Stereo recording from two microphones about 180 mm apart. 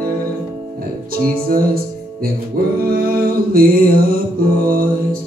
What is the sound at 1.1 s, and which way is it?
Music, 55° right (ahead or behind).